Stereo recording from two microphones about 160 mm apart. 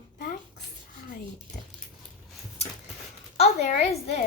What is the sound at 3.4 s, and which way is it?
Speech, 45° left (ahead or behind).